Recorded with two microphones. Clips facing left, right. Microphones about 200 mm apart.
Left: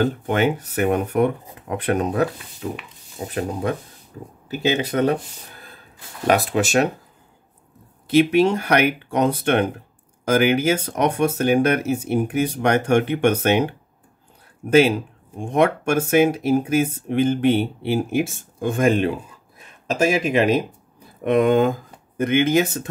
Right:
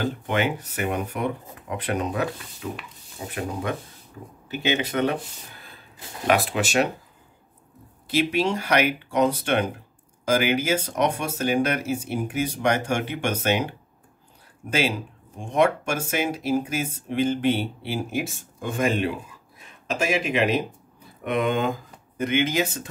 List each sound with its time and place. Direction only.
0.0 s speech: 45° left (ahead or behind)
2.6 s speech: 30° left (ahead or behind)
4.5 s speech: 35° left (ahead or behind)
6.2 s speech: 40° left (ahead or behind)
8.2 s speech: 55° left (ahead or behind)